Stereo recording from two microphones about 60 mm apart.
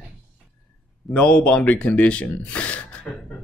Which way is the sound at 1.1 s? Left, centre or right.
Centre.